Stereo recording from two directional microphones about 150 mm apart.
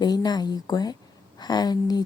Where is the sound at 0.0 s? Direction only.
25° left (ahead or behind).